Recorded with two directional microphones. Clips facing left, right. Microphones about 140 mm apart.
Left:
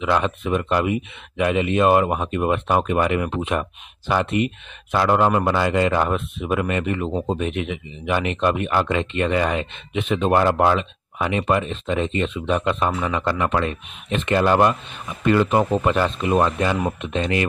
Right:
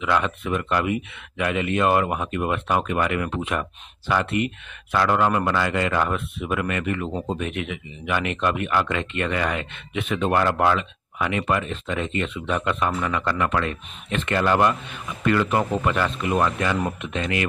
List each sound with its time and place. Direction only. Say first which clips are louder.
0.0 s speech: left 2 dB; 25° left (ahead or behind)